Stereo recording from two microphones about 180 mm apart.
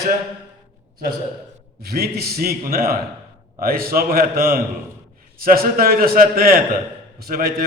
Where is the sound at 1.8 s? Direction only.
60° right (ahead or behind).